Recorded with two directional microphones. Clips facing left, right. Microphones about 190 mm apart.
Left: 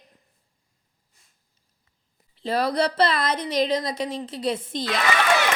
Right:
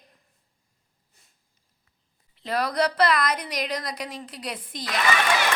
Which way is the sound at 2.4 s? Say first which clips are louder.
Left 2 dB; 30° left (ahead or behind).